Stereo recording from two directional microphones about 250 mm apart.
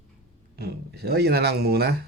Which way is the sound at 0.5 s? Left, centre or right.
Right.